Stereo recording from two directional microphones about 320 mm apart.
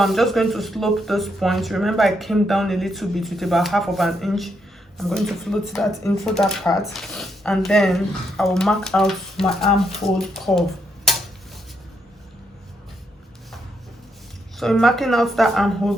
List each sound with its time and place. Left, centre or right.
0.0 s speech: centre
14.6 s speech: centre